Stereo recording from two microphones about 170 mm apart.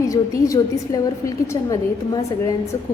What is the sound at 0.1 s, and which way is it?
A woman's voice, 20° left (ahead or behind).